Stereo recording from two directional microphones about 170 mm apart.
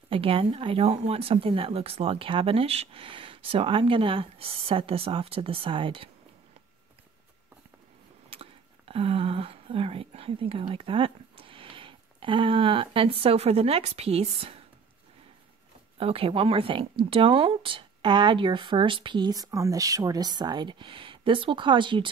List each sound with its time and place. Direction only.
0.1 s speech: 30° right (ahead or behind)
8.3 s speech: 35° right (ahead or behind)
16.0 s speech: 35° right (ahead or behind)